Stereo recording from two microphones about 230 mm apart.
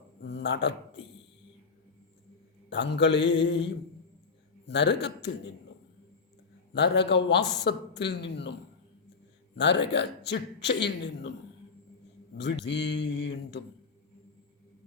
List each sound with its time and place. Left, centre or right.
0.2 s a man's voice: left
2.6 s a man's voice: left
6.7 s a man's voice: left
9.6 s a man's voice: left
12.4 s a man's voice: left